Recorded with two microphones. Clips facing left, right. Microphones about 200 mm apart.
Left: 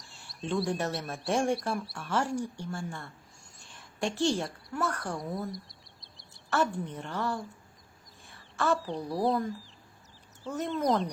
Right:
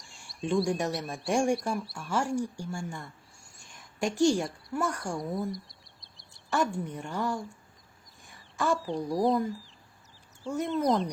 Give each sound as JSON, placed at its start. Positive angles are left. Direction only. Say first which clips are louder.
{"t": 0.6, "sound": "a woman's voice", "louder": "right 2 dB", "side_deg": -10}
{"t": 1.3, "sound": "a woman's voice", "louder": "right 2 dB", "side_deg": -10}
{"t": 1.7, "sound": "a woman's voice", "louder": "even", "side_deg": 0}
{"t": 3.7, "sound": "a sound", "louder": "right 2 dB", "side_deg": -15}
{"t": 4.8, "sound": "a woman's voice", "louder": "right 1 dB", "side_deg": -15}
{"t": 5.1, "sound": "a sound", "louder": "right 3 dB", "side_deg": 0}
{"t": 6.5, "sound": "a woman's voice", "louder": "even", "side_deg": -10}
{"t": 8.5, "sound": "speech", "louder": "even", "side_deg": -15}
{"t": 8.8, "sound": "speech", "louder": "right 2 dB", "side_deg": 0}